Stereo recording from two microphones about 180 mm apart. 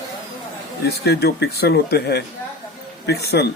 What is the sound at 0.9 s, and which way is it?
Speech, 65° left (ahead or behind).